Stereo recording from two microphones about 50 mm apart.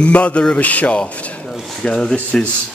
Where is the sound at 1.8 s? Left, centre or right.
Centre.